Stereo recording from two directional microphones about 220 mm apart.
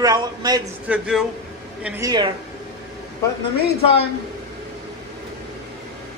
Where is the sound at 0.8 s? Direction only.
5° right (ahead or behind).